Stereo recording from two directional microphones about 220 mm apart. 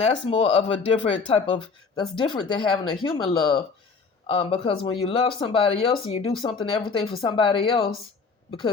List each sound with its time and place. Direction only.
0.0 s speech: 25° left (ahead or behind)